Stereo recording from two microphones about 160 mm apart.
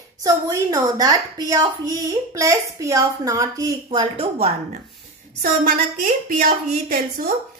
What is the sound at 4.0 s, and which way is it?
Speech, 40° right (ahead or behind).